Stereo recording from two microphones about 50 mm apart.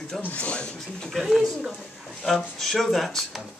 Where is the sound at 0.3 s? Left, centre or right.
Left.